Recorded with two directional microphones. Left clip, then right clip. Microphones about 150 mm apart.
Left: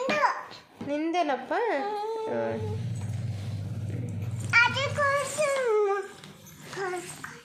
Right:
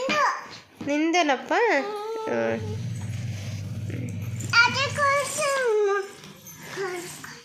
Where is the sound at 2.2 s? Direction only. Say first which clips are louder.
Right 8 dB; 30° right (ahead or behind).